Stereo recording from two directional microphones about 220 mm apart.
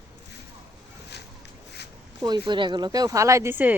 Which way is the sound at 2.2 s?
20° right (ahead or behind).